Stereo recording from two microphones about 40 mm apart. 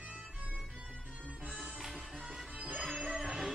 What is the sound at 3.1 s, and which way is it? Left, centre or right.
Music, centre.